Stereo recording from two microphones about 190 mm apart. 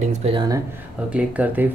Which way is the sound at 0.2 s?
25° right (ahead or behind).